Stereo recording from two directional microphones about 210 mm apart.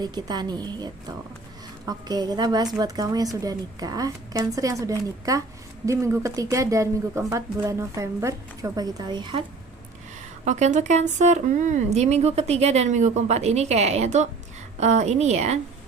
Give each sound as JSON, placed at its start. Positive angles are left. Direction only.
{"t": 0.0, "sound": "a woman's voice", "side_deg": -20}
{"t": 10.4, "sound": "speech", "side_deg": -35}